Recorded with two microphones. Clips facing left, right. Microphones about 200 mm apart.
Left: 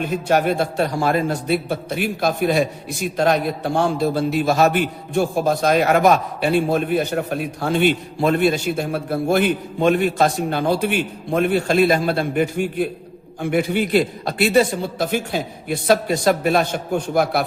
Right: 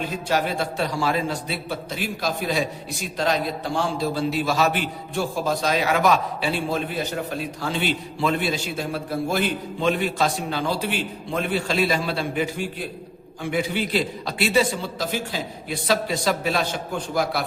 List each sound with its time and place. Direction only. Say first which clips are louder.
0.0 s a man's voice: left 6 dB; 55° left (ahead or behind)